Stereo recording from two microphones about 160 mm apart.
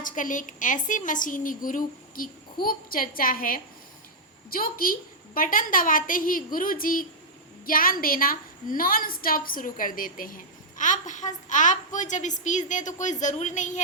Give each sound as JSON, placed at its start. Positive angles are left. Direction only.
{"t": 0.0, "sound": "a woman's voice", "side_deg": 55}